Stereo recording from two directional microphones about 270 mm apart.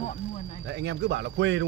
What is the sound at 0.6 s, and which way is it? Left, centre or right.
Speech, right.